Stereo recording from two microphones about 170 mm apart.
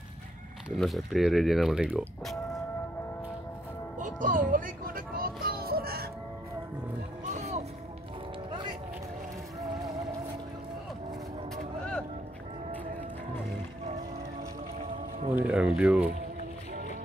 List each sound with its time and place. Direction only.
0.7 s speech: centre (ahead or behind)
4.0 s music: 50° right (ahead or behind)
7.3 s music: 40° right (ahead or behind)
8.5 s music: 30° right (ahead or behind)
11.5 s vehicle: 5° left (ahead or behind)
15.3 s speech: 5° right (ahead or behind)